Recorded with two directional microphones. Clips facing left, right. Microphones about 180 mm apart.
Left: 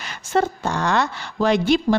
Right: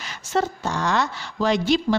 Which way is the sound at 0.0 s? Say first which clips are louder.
Left 3 dB; 55° left (ahead or behind).